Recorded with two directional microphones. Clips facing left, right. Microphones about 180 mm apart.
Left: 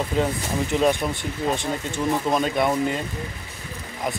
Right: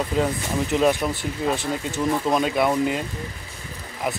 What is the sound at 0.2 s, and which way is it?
Speech, centre (ahead or behind).